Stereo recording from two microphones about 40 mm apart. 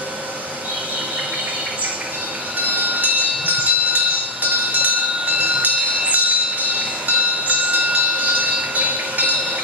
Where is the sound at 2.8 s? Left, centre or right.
Right.